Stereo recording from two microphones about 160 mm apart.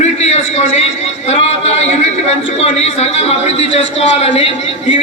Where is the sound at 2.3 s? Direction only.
40° left (ahead or behind).